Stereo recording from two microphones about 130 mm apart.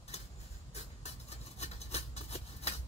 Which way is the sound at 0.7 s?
55° left (ahead or behind).